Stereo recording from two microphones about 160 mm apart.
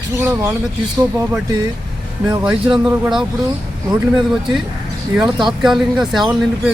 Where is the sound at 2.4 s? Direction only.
5° right (ahead or behind).